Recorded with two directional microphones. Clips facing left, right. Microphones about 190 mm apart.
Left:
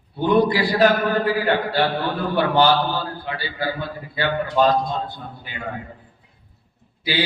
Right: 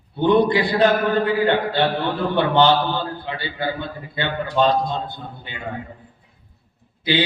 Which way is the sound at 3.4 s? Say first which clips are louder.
Right 1 dB; 25° right (ahead or behind).